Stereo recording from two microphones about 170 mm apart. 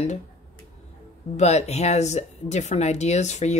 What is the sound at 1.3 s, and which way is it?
Speech, 40° left (ahead or behind).